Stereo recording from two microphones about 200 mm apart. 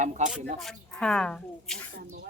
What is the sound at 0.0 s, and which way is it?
Speech, 35° right (ahead or behind).